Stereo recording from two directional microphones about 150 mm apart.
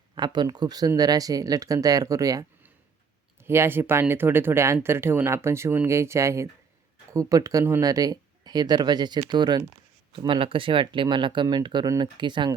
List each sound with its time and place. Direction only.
0.2 s speech: 30° right (ahead or behind)